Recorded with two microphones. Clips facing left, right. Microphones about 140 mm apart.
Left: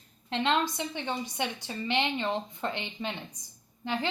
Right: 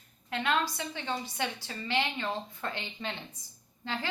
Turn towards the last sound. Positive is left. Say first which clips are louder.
# left 5 dB
turn(degrees=15)  # may be behind; listen again after turning